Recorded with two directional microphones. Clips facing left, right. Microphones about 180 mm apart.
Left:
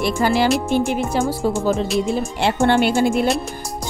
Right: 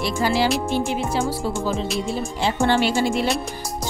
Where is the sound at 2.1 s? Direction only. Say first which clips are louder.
Left 3 dB; 55° left (ahead or behind).